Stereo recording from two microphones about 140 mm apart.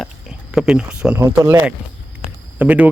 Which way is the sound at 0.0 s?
5° right (ahead or behind).